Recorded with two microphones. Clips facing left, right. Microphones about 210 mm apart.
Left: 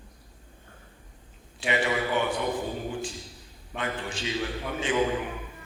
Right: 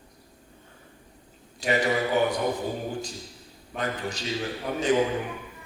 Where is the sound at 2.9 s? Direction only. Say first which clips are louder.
Even; 40° right (ahead or behind).